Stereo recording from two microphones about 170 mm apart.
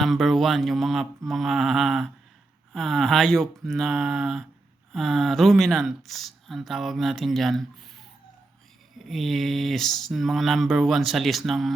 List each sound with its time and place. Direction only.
0.0 s speech: centre (ahead or behind)
9.0 s speech: centre (ahead or behind)